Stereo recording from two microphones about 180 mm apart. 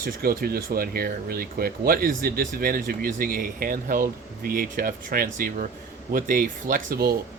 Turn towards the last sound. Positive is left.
turn(degrees=-55)  # may be behind; listen again after turning